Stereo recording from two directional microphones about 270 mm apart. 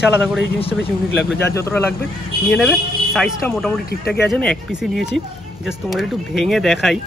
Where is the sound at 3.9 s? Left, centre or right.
Left.